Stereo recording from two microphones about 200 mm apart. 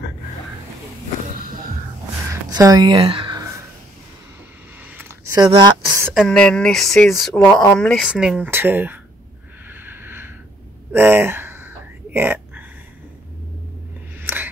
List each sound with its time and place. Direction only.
2.5 s speech: 20° right (ahead or behind)
4.9 s speech: 10° right (ahead or behind)
6.1 s speech: 5° left (ahead or behind)
7.3 s speech: 15° left (ahead or behind)
7.8 s speech: 5° left (ahead or behind)
9.7 s a sound: 10° right (ahead or behind)
14.2 s a sound: 10° right (ahead or behind)